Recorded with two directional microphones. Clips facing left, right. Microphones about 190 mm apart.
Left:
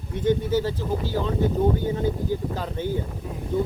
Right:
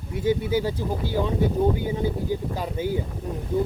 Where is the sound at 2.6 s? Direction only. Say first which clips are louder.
Right 1 dB; 10° right (ahead or behind).